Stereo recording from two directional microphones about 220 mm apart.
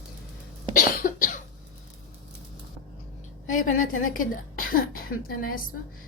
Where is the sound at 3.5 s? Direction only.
35° left (ahead or behind).